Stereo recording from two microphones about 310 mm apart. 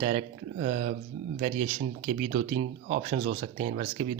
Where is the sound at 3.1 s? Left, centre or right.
Right.